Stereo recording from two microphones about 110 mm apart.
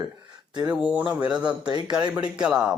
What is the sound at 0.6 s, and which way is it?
Speech, 10° right (ahead or behind).